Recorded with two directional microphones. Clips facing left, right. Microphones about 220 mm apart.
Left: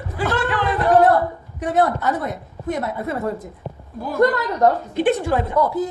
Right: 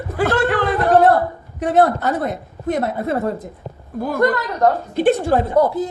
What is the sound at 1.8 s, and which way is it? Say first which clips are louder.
Speech: right 3 dB; 40° right (ahead or behind).